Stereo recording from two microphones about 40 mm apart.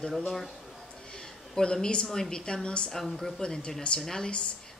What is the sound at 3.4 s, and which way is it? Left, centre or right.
Speech, left.